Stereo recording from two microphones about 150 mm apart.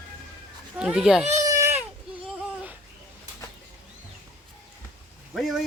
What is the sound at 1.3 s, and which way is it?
Baby cry, 20° right (ahead or behind).